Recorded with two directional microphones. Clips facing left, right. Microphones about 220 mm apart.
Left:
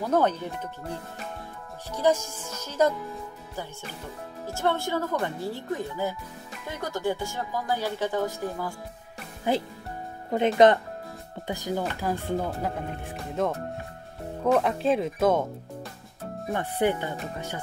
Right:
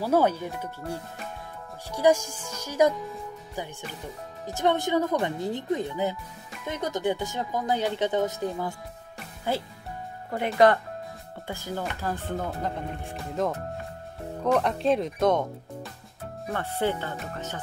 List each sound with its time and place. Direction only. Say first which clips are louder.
0.0 s speech: right 1 dB; 10° right (ahead or behind)
1.9 s speech: right 2 dB; 10° right (ahead or behind)
4.6 s speech: right 3 dB; 20° right (ahead or behind)
9.5 s speech: left 3 dB; 15° left (ahead or behind)
12.4 s speech: left 1 dB; centre (ahead or behind)
16.5 s speech: left 2 dB; 15° left (ahead or behind)